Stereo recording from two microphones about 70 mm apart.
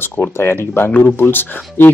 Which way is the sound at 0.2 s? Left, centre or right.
Left.